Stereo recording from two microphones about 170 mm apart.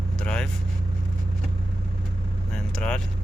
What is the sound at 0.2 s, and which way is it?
Vehicle, 5° left (ahead or behind).